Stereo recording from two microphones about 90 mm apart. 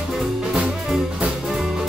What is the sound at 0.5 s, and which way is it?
Music, 5° right (ahead or behind).